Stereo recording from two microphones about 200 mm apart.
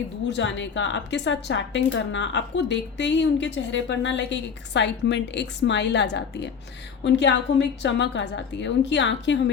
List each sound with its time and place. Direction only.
0.3 s a woman's voice: 65° left (ahead or behind)